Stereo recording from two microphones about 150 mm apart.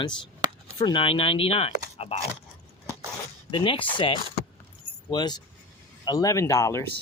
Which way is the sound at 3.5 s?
35° left (ahead or behind).